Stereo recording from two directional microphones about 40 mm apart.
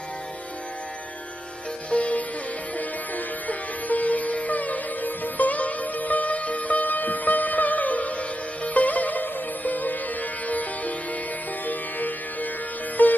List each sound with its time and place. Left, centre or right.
1.9 s music: left
2.7 s sitar: left
8.6 s music: left